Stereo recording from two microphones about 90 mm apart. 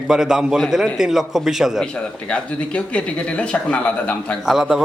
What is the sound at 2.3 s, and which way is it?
A man's voice, 10° left (ahead or behind).